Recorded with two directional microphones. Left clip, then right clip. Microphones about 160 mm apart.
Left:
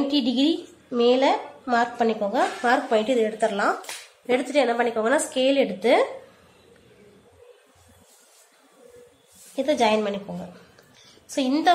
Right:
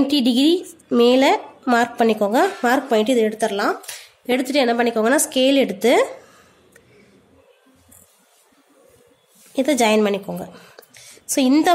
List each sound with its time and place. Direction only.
0.1 s a woman's voice: 90° right
9.6 s a woman's voice: 85° right
11.3 s a woman's voice: 75° right (ahead or behind)